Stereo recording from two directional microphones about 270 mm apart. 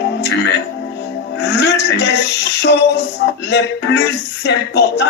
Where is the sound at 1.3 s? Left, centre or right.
Left.